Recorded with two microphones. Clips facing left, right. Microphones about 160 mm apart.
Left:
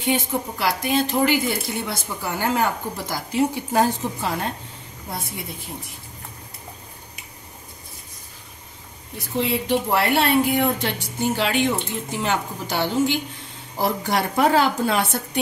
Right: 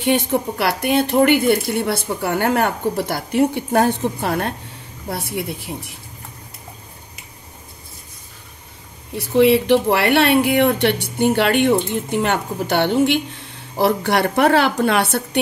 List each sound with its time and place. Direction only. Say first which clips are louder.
0.0 s a woman's voice: right 5 dB; 70° right (ahead or behind)
9.3 s speech: right 9 dB; 75° right (ahead or behind)